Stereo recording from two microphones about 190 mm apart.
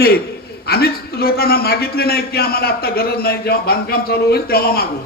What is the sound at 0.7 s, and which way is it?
A man's voice, 55° left (ahead or behind).